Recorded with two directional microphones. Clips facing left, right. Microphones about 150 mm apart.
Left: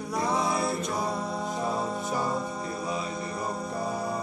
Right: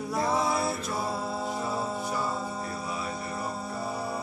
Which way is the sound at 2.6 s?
20° left (ahead or behind).